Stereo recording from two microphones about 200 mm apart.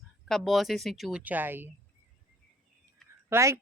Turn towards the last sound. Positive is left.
turn(degrees=-15)  # may be behind; listen again after turning